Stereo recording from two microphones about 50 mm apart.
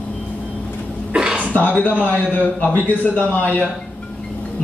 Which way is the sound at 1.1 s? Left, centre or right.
Centre.